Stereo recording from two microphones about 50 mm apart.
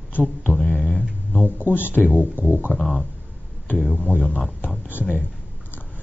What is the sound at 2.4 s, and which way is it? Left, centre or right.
Speech, right.